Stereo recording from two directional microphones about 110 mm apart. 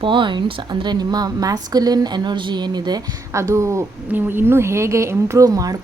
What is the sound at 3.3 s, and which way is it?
A woman's voice, 25° right (ahead or behind).